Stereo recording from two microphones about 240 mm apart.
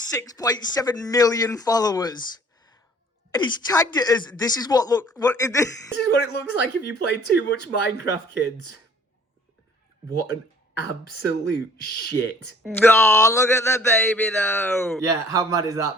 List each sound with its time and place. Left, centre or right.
0.2 s speech: centre
3.3 s speech: centre
5.9 s speech: left
10.8 s speech: left
12.7 s speech: centre
15.0 s a man's voice: centre